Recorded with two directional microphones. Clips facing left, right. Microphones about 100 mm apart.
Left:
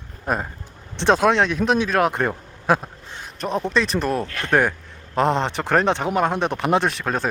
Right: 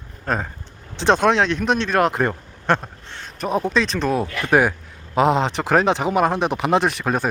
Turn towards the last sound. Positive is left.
turn(degrees=0)  # may be behind; listen again after turning